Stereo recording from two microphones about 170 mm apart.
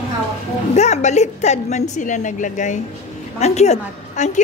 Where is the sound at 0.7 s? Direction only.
40° left (ahead or behind).